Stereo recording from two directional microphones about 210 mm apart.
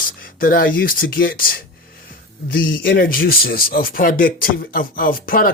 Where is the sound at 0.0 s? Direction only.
40° left (ahead or behind).